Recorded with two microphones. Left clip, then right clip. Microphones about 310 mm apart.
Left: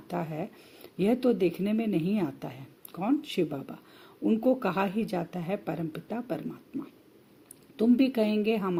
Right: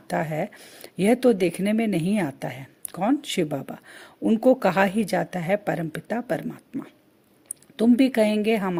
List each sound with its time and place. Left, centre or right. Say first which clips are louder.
0.1 s speech: right 8 dB; right